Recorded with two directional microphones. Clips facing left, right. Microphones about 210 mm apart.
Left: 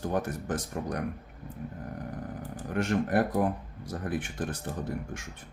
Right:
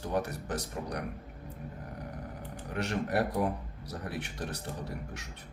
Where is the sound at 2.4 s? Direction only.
50° left (ahead or behind).